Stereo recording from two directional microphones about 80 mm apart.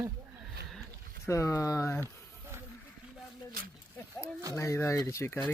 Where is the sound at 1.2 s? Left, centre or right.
Left.